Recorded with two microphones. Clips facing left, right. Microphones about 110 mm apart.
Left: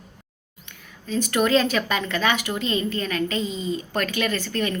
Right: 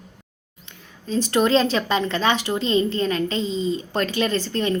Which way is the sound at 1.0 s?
30° right (ahead or behind).